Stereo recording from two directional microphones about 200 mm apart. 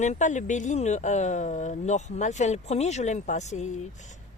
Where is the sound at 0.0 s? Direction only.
35° left (ahead or behind).